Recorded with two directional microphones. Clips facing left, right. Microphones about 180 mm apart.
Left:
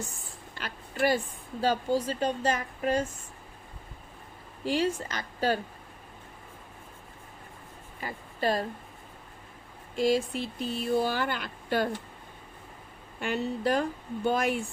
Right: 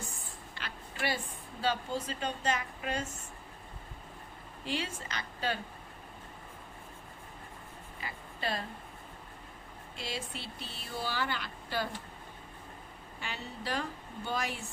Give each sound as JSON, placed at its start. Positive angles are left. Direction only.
{"t": 0.5, "sound": "a sound", "side_deg": 45}
{"t": 1.6, "sound": "a woman's voice", "side_deg": 40}
{"t": 4.6, "sound": "speech", "side_deg": 45}
{"t": 8.0, "sound": "a woman's voice", "side_deg": 45}
{"t": 9.9, "sound": "speech", "side_deg": 45}
{"t": 13.1, "sound": "speech", "side_deg": 55}